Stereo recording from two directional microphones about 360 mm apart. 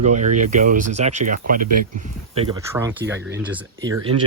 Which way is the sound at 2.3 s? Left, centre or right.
Centre.